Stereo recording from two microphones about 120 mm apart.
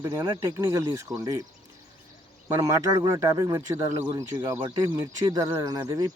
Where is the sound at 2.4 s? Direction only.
25° right (ahead or behind).